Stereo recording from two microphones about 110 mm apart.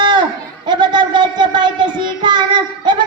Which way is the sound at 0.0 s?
45° right (ahead or behind).